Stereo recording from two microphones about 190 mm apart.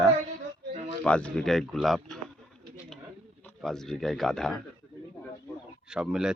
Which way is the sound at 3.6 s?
Centre (ahead or behind).